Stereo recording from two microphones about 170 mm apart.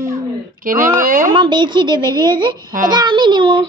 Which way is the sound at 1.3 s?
25° right (ahead or behind).